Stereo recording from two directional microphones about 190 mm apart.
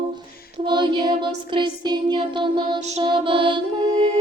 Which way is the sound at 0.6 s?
25° right (ahead or behind).